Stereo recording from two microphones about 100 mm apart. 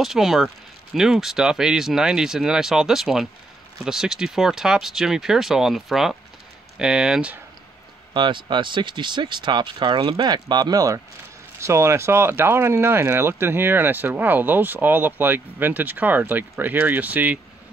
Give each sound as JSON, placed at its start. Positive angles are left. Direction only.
{"t": 0.0, "sound": "speech", "side_deg": -5}
{"t": 8.1, "sound": "speech", "side_deg": -50}